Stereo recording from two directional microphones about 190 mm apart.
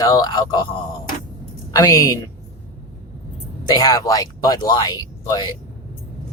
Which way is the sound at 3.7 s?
20° left (ahead or behind).